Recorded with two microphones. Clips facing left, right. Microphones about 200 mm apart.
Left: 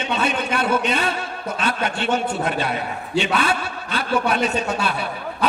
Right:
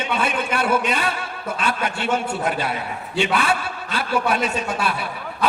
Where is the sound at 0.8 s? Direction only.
25° left (ahead or behind).